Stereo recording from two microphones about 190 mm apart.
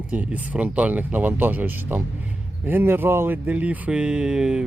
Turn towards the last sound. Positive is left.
turn(degrees=-5)  # may be behind; listen again after turning